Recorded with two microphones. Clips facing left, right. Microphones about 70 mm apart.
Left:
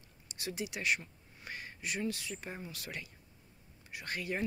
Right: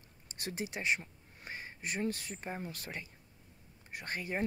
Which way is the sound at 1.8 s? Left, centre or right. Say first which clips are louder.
Right 1 dB; right.